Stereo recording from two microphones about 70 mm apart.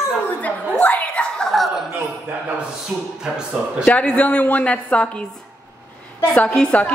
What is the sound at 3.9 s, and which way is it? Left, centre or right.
A woman's voice, centre.